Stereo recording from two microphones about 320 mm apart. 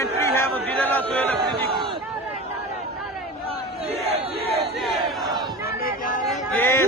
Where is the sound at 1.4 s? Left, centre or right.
Centre.